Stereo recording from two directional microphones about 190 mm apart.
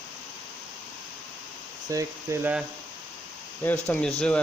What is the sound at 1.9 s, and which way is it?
Speech, 15° right (ahead or behind).